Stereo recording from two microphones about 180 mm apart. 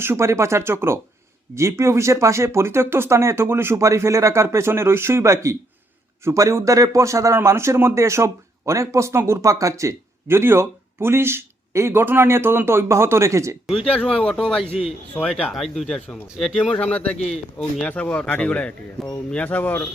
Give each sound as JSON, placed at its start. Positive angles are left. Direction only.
{"t": 0.0, "sound": "a man's voice", "side_deg": -15}
{"t": 13.7, "sound": "speech", "side_deg": 5}
{"t": 14.6, "sound": "a man's voice", "side_deg": 35}
{"t": 15.1, "sound": "speech", "side_deg": 5}
{"t": 17.2, "sound": "a man's voice", "side_deg": 35}
{"t": 17.6, "sound": "speech", "side_deg": 5}